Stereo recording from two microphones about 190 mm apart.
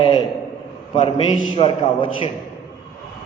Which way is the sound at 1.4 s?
30° left (ahead or behind).